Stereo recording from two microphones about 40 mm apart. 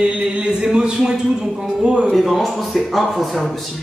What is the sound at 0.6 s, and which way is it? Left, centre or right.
Speech, right.